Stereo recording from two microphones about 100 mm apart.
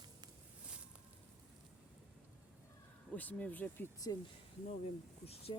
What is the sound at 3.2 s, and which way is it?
Speech, 15° left (ahead or behind).